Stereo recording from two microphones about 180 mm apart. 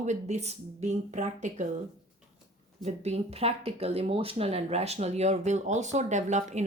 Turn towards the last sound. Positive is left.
turn(degrees=-40)  # may be behind; listen again after turning